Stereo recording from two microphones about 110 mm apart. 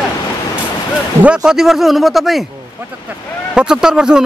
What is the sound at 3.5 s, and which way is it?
Speech, 5° right (ahead or behind).